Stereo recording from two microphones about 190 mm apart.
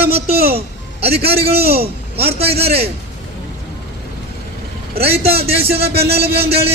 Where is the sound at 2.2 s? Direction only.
30° right (ahead or behind).